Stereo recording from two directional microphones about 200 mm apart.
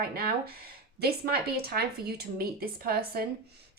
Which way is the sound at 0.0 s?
50° right (ahead or behind).